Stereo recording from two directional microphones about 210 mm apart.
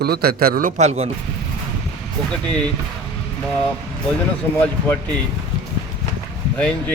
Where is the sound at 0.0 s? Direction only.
50° right (ahead or behind); by 1.1 s 30° right (ahead or behind).